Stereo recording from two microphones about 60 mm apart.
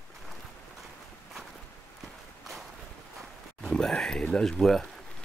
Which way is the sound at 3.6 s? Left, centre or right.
Centre.